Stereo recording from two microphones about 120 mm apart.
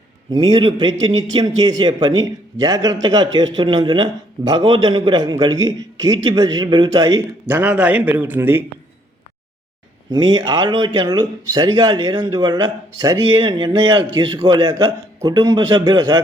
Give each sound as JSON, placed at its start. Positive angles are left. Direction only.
{"t": 0.3, "sound": "a man's voice", "side_deg": -45}
{"t": 7.4, "sound": "a man's voice", "side_deg": -15}
{"t": 10.1, "sound": "a man's voice", "side_deg": -35}